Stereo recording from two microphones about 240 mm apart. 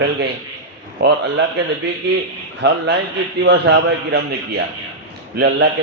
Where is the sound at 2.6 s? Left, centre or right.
Right.